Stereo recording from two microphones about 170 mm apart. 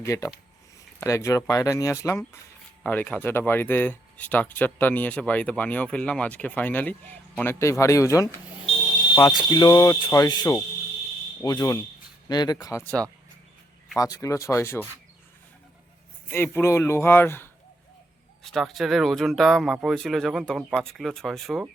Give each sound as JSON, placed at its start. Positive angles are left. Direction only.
{"t": 0.0, "sound": "speech", "side_deg": 20}
{"t": 14.0, "sound": "speech", "side_deg": 20}
{"t": 16.3, "sound": "speech", "side_deg": 15}
{"t": 18.4, "sound": "speech", "side_deg": 0}